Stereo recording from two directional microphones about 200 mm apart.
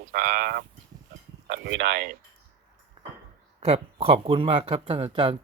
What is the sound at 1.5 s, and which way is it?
Speech, 60° right (ahead or behind).